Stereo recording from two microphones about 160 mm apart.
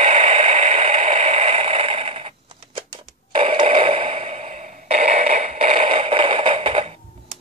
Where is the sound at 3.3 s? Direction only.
35° right (ahead or behind).